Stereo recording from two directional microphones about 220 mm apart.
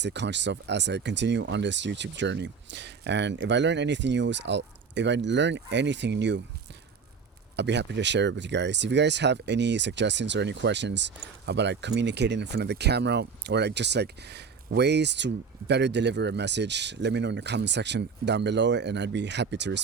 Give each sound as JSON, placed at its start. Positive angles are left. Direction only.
{"t": 0.0, "sound": "speech", "side_deg": -55}
{"t": 7.5, "sound": "speech", "side_deg": -50}